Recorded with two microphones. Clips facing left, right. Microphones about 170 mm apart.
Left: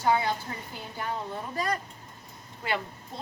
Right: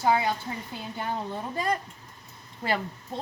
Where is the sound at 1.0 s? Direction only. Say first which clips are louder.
Right 1 dB; 30° right (ahead or behind).